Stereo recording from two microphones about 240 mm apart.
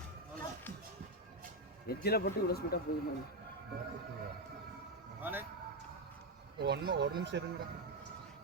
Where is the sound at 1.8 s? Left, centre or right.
Left.